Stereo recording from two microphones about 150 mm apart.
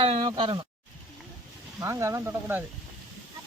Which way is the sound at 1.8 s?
20° right (ahead or behind).